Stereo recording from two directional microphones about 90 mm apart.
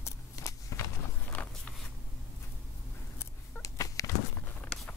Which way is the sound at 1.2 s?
20° left (ahead or behind).